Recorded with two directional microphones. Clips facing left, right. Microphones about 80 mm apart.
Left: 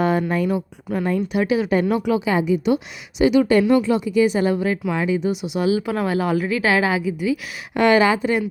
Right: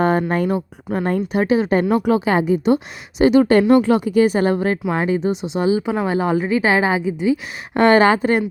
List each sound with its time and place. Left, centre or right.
0.0 s speech: right
3.7 s speech: right
5.3 s a woman's voice: right
7.8 s speech: right